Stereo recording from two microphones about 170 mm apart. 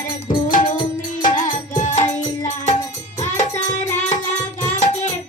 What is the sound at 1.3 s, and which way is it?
Music, 45° left (ahead or behind).